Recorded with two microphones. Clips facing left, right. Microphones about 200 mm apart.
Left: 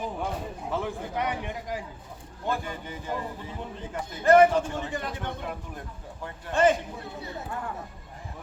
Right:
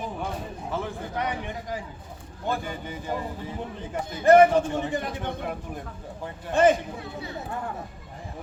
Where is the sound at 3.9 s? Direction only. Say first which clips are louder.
Right 2 dB; 20° right (ahead or behind).